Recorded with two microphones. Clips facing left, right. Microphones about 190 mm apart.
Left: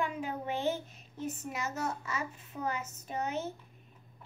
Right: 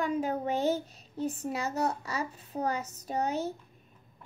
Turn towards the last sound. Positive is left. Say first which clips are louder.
# right 4 dB
turn(degrees=-35)  # may be behind; listen again after turning